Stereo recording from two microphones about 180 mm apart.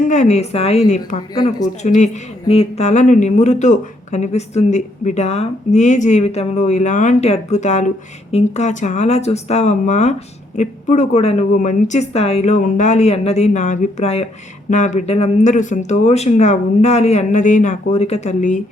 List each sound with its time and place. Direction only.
0.1 s speech: 40° left (ahead or behind)